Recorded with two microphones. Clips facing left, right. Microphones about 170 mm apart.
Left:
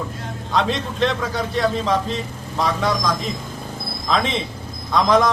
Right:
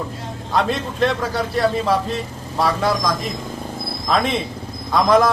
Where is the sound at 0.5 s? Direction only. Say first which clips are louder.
Right 1 dB; 5° right (ahead or behind).